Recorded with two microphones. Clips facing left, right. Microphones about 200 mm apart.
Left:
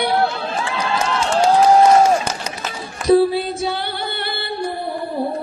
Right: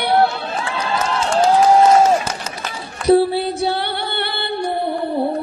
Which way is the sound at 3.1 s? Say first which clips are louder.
Even; 65° right (ahead or behind).